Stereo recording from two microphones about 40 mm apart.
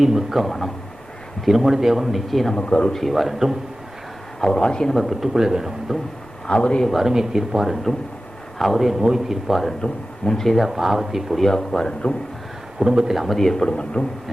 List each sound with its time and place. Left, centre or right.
0.0 s a man's voice: centre
2.6 s speech: left
2.9 s a man's voice: centre
4.5 s speech: centre
4.9 s speech: centre
6.5 s speech: left
7.0 s a man's voice: centre
9.5 s a man's voice: centre
10.7 s speech: centre
11.3 s speech: centre
12.8 s speech: centre
13.1 s speech: centre
13.7 s speech: left